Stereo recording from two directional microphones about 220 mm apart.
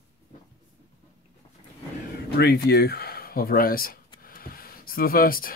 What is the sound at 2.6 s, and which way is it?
Speech, 45° left (ahead or behind).